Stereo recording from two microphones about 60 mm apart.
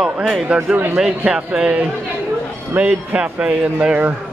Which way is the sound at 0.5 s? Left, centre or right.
Centre.